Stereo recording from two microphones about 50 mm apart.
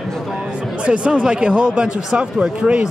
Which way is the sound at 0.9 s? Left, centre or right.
Right.